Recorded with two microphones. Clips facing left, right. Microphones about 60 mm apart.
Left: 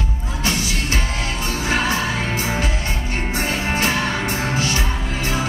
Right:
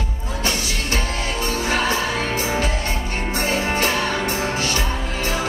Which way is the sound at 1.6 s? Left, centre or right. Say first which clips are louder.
Left 1 dB; centre.